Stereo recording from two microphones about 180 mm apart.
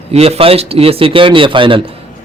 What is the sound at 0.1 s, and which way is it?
A man's voice, 35° right (ahead or behind).